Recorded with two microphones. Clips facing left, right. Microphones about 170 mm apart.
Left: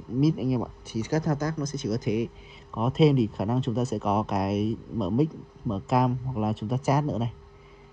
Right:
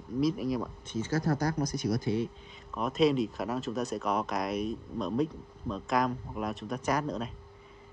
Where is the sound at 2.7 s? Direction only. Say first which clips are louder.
Left 5 dB; centre (ahead or behind).